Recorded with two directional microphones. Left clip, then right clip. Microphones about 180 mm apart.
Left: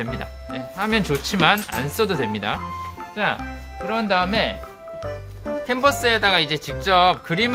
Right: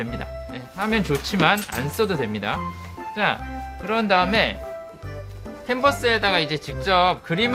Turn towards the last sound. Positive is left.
turn(degrees=20)  # may be behind; listen again after turning